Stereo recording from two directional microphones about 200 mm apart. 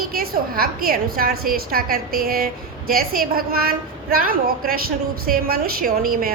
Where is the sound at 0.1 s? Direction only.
45° right (ahead or behind).